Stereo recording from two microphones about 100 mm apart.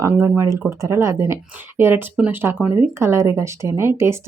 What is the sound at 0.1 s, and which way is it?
Speech, 25° right (ahead or behind).